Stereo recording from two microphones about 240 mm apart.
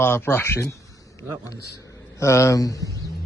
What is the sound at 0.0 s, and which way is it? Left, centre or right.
A man's voice, centre.